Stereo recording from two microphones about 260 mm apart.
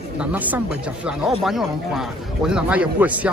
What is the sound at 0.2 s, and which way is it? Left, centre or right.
Speech, centre.